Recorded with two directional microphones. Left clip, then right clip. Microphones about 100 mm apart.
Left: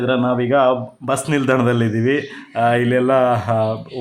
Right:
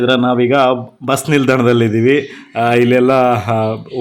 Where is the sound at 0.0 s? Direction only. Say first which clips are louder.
Right 5 dB; 40° right (ahead or behind).